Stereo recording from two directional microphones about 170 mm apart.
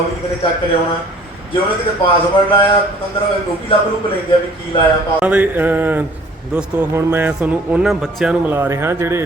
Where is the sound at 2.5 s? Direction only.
30° left (ahead or behind).